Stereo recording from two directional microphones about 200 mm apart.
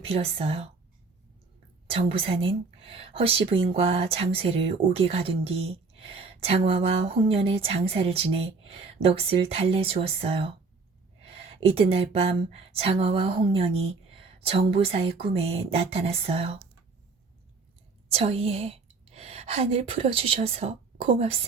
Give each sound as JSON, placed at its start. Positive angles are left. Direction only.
{"t": 0.0, "sound": "speech", "side_deg": -30}
{"t": 1.9, "sound": "speech", "side_deg": -30}
{"t": 11.6, "sound": "speech", "side_deg": -30}
{"t": 18.1, "sound": "a woman's voice", "side_deg": -30}